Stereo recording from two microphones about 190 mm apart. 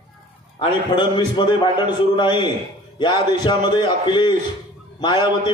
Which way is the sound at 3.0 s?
20° left (ahead or behind).